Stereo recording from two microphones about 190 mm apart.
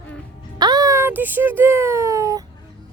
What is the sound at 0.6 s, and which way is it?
Speech, 20° right (ahead or behind).